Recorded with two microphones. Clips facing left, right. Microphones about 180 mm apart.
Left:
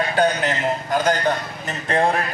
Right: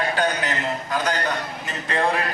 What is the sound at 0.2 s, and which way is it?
A man's voice, 45° left (ahead or behind).